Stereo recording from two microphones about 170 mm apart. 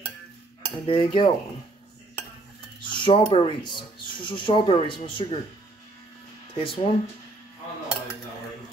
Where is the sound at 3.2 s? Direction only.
30° left (ahead or behind).